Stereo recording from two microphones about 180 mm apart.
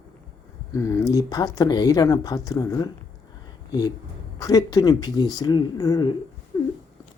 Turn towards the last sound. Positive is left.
turn(degrees=20)  # may be behind; listen again after turning